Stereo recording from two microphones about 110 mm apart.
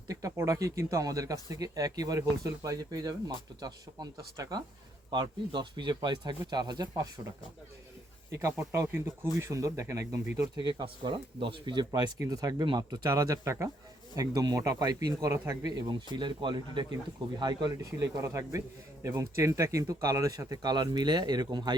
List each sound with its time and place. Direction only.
0.1 s speech: 30° right (ahead or behind)
8.4 s speech: 25° right (ahead or behind)
10.6 s speech: 40° right (ahead or behind)
10.8 s speech: 50° right (ahead or behind); by 15.7 s 30° right (ahead or behind)
15.9 s speech: 45° right (ahead or behind)
18.0 s speech: 30° right (ahead or behind)